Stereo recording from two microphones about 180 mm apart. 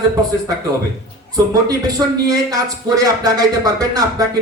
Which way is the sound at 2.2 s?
20° right (ahead or behind).